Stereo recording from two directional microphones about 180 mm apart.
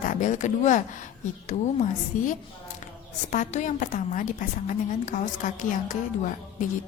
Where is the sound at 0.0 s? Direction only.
45° left (ahead or behind).